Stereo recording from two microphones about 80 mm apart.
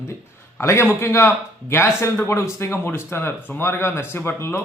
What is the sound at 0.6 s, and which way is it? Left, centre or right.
Speech, left.